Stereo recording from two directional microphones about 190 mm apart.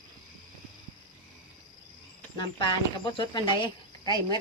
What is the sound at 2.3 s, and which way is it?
Speech, 25° left (ahead or behind).